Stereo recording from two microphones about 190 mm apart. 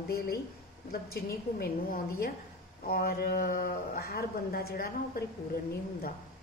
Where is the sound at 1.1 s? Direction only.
55° left (ahead or behind).